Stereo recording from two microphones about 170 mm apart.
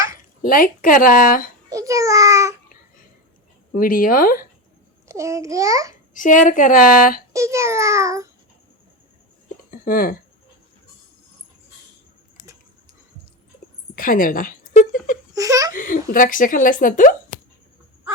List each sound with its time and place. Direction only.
0.4 s a woman's voice: 55° left (ahead or behind)
1.7 s a child's voice: 20° right (ahead or behind)
3.8 s a woman's voice: 55° left (ahead or behind)
5.0 s a child's voice: 15° right (ahead or behind)
6.1 s speech: 50° left (ahead or behind)
7.3 s a child's voice: 15° right (ahead or behind)
9.8 s a woman's voice: 60° left (ahead or behind)
13.9 s a sound: 55° left (ahead or behind)
15.3 s giggle: 20° right (ahead or behind)
15.7 s speech: 50° left (ahead or behind)